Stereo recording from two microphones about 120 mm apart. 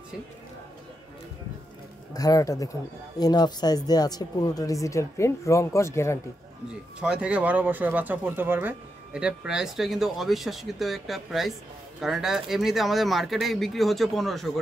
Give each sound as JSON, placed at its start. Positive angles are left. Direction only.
{"t": 2.1, "sound": "speech", "side_deg": 30}
{"t": 7.0, "sound": "speech", "side_deg": -10}